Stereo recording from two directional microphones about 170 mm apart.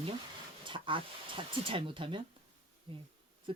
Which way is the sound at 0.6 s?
30° right (ahead or behind).